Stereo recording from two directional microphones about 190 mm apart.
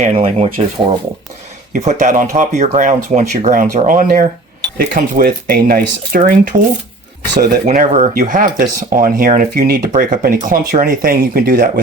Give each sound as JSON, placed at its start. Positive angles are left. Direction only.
{"t": 0.0, "sound": "speech", "side_deg": -30}
{"t": 1.7, "sound": "speech", "side_deg": -40}